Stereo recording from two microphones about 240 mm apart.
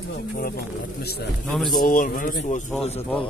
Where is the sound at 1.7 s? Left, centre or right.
Left.